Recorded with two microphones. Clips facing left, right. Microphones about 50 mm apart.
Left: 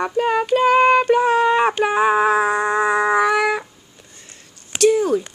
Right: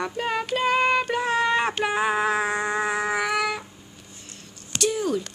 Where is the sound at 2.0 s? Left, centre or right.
Left.